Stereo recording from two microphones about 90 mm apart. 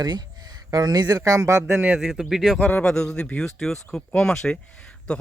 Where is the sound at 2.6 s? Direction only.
15° left (ahead or behind).